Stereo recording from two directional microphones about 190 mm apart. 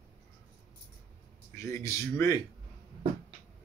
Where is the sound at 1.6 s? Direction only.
15° left (ahead or behind).